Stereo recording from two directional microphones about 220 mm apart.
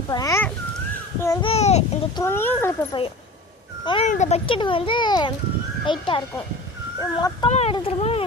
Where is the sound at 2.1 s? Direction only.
10° left (ahead or behind).